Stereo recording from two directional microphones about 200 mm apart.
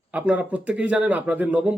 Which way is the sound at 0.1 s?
10° right (ahead or behind).